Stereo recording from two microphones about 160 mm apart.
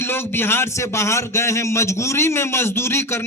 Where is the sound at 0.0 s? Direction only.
15° left (ahead or behind).